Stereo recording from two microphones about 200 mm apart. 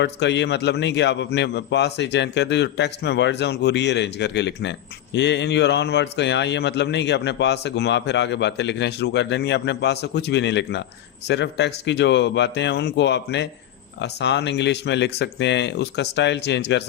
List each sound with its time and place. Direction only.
0.0 s a man's voice: 60° left (ahead or behind)